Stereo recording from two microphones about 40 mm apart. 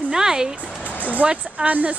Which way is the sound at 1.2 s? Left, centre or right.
Right.